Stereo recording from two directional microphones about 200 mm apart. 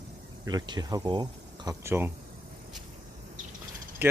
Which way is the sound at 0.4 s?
20° right (ahead or behind).